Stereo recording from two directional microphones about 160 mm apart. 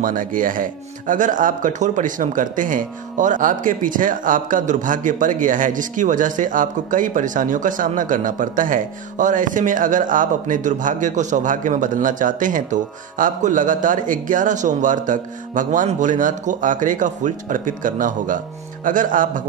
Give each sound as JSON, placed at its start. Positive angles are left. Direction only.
{"t": 0.0, "sound": "speech", "side_deg": -55}